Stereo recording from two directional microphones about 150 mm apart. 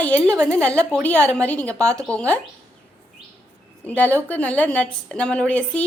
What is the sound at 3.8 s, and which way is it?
A woman's voice, 10° left (ahead or behind).